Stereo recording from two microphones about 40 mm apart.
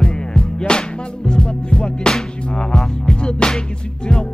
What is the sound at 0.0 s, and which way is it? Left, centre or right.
Music, left.